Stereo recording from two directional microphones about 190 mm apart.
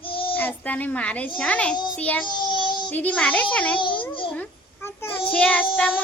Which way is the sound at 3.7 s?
25° left (ahead or behind).